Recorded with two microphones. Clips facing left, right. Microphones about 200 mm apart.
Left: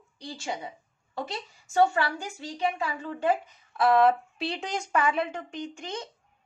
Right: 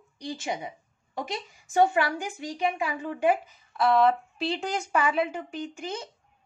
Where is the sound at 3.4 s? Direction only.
Centre (ahead or behind).